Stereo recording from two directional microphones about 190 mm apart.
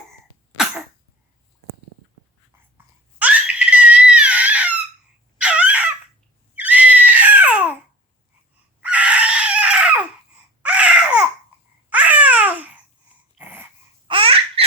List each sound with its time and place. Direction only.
0.5 s cough: centre (ahead or behind)
2.7 s screaming: 5° right (ahead or behind)
5.4 s chicken: 5° right (ahead or behind)
6.6 s screaming: 10° right (ahead or behind)
8.8 s a sound: 5° right (ahead or behind)
10.6 s baby cry: 5° right (ahead or behind)
11.9 s babbling: 10° right (ahead or behind)
13.4 s dog: 10° right (ahead or behind)
14.1 s baby laughter: 30° right (ahead or behind)